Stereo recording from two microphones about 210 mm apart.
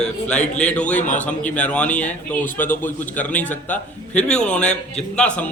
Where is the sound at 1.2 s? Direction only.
5° left (ahead or behind).